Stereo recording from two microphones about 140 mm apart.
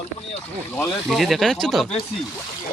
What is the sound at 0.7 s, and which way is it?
Speech, 15° left (ahead or behind).